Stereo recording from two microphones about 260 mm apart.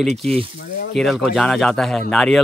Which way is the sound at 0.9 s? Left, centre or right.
Centre.